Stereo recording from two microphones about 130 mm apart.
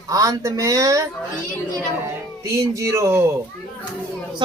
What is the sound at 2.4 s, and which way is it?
Speech, 25° right (ahead or behind).